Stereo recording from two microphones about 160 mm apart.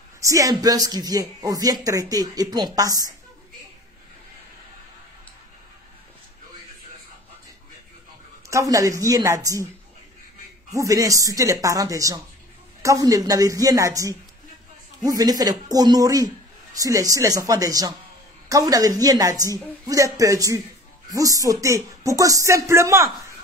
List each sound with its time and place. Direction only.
0.2 s a woman's voice: 20° right (ahead or behind)
8.5 s a woman's voice: 20° right (ahead or behind)
10.7 s a woman's voice: 20° right (ahead or behind)